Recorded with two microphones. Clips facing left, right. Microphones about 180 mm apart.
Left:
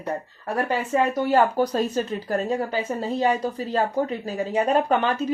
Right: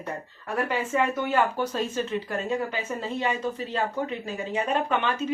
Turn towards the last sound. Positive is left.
turn(degrees=40)  # may be behind; listen again after turning